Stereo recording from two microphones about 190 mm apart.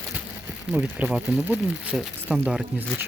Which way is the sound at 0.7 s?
5° right (ahead or behind).